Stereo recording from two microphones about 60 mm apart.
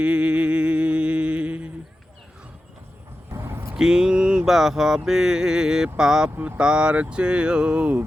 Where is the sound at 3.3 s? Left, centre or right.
Right.